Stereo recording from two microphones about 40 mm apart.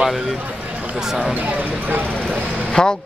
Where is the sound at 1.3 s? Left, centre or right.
Right.